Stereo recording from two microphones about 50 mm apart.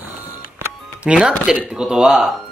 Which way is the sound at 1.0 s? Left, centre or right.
Centre.